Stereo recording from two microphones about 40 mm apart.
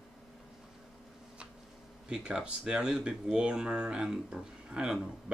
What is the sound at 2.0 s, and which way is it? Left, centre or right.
Speech, right.